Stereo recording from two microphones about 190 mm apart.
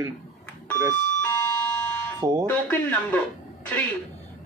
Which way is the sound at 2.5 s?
5° left (ahead or behind).